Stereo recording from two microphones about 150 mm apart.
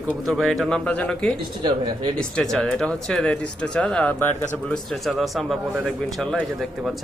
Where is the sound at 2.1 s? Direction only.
5° left (ahead or behind).